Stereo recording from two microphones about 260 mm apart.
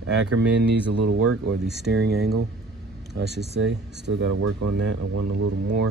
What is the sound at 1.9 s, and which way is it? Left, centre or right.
Speech, right.